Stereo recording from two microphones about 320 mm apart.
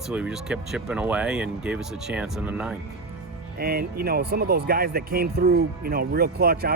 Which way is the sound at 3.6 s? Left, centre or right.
Right.